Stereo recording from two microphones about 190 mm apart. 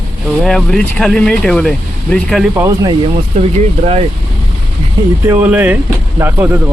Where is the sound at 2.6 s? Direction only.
20° right (ahead or behind).